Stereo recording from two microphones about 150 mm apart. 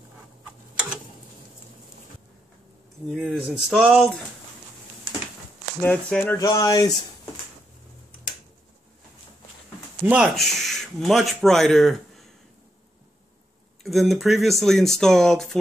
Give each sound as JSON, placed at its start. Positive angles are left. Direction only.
{"t": 3.1, "sound": "speech", "side_deg": 0}
{"t": 5.8, "sound": "speech", "side_deg": 10}
{"t": 6.3, "sound": "speech", "side_deg": 25}
{"t": 10.0, "sound": "speech", "side_deg": -5}
{"t": 13.8, "sound": "speech", "side_deg": 0}